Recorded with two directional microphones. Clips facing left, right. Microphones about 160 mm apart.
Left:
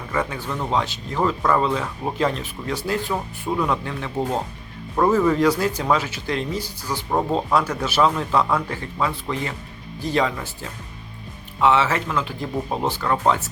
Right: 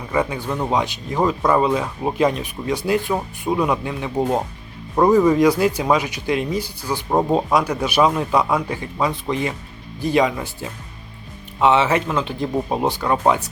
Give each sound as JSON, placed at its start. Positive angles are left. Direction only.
{"t": 0.1, "sound": "speech", "side_deg": -15}